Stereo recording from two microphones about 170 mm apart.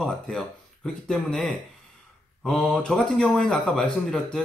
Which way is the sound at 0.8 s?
5° left (ahead or behind).